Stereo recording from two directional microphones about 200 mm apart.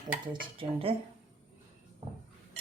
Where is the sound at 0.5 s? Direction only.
25° right (ahead or behind).